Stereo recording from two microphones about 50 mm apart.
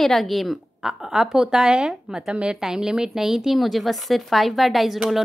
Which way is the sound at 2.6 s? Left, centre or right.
Centre.